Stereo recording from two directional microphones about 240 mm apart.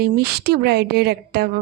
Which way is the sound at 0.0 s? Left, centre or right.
Right.